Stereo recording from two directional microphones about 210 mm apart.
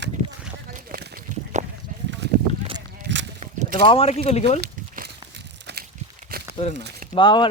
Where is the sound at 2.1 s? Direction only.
55° right (ahead or behind).